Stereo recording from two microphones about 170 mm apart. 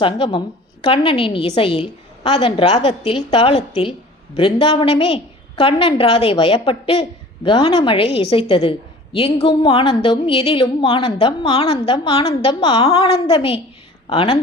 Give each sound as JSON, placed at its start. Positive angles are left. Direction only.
{"t": 0.0, "sound": "a woman's voice", "side_deg": 30}